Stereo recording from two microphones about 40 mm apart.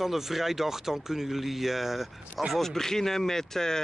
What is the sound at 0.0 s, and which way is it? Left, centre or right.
Speech, centre.